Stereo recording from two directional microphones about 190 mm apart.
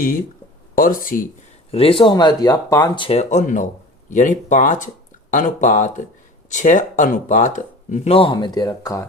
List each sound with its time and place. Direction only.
0.8 s speech: 45° left (ahead or behind)
1.7 s speech: 30° left (ahead or behind)